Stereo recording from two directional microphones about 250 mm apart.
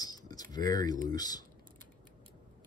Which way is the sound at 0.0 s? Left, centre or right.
Centre.